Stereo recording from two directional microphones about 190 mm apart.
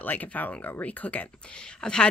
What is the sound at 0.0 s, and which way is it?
Speech, 10° left (ahead or behind).